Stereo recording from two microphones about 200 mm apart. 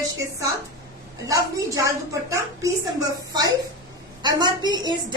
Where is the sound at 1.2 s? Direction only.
15° right (ahead or behind).